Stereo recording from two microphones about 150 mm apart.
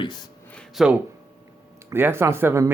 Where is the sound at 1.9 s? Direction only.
15° right (ahead or behind).